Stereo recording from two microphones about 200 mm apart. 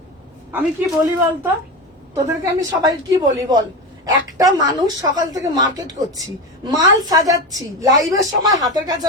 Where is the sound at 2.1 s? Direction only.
15° right (ahead or behind).